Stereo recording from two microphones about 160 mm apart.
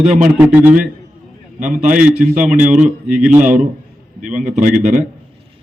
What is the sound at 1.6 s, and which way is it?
A man's voice, 50° right (ahead or behind).